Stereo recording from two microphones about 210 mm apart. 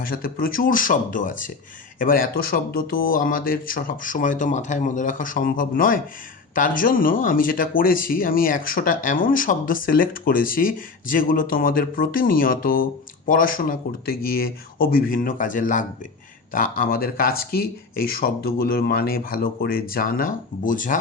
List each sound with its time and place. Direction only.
0.0 s speech: 45° left (ahead or behind)